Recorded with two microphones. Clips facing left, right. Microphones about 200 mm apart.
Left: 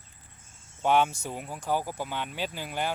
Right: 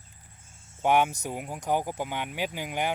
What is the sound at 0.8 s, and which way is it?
Speech, 15° right (ahead or behind).